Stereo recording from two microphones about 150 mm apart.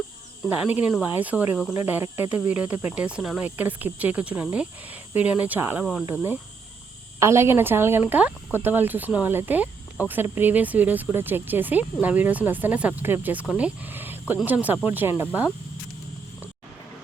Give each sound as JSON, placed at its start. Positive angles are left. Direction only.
{"t": 0.4, "sound": "speech", "side_deg": -10}
{"t": 5.8, "sound": "speech", "side_deg": -5}
{"t": 6.1, "sound": "speech", "side_deg": -15}